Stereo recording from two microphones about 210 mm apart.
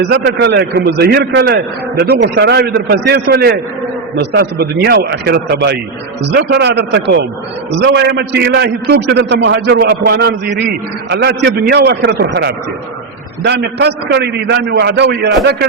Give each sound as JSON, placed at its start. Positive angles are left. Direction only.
{"t": 0.0, "sound": "a man's voice", "side_deg": -55}